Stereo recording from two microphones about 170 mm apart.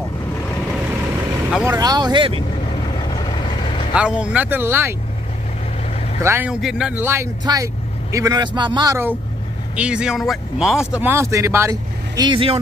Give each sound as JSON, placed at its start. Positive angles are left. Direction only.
{"t": 1.6, "sound": "speech", "side_deg": -20}
{"t": 2.7, "sound": "vehicle", "side_deg": 25}
{"t": 3.9, "sound": "speech", "side_deg": -5}
{"t": 6.2, "sound": "speech", "side_deg": -10}
{"t": 9.8, "sound": "speech", "side_deg": -5}